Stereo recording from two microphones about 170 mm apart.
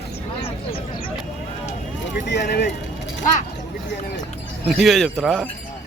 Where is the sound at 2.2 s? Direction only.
90° left.